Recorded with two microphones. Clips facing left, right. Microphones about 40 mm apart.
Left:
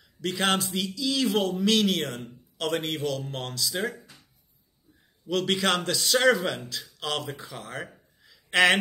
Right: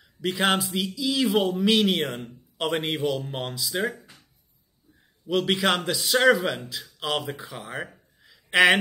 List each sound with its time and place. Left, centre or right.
0.2 s a man's voice: centre
3.8 s speech: right
5.2 s a man's voice: centre
7.3 s a sound: centre